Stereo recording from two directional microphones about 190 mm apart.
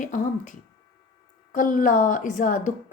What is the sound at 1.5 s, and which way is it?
A woman's voice, 45° left (ahead or behind).